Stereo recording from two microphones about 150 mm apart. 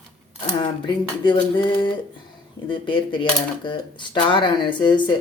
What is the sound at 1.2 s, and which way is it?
Speech, 35° left (ahead or behind).